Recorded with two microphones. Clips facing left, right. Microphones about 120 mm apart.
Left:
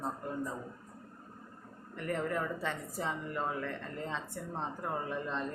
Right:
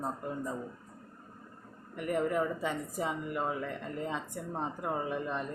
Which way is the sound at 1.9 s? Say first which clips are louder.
Right 4 dB; 15° right (ahead or behind).